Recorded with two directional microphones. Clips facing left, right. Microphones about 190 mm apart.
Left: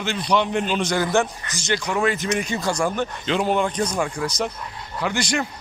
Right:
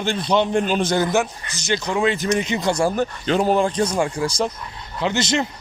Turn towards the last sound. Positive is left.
turn(degrees=-25)  # may be behind; listen again after turning